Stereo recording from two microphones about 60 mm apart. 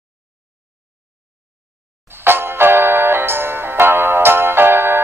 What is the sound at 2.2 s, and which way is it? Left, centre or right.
Music, right.